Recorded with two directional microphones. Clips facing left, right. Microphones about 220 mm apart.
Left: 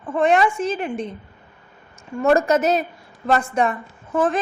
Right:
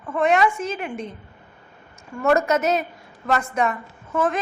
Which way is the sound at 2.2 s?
30° left (ahead or behind).